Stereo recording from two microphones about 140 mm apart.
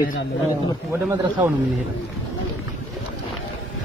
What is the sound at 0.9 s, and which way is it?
Speech, 15° right (ahead or behind).